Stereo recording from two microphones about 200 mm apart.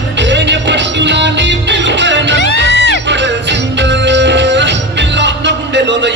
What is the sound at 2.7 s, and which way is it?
Music, 60° left (ahead or behind).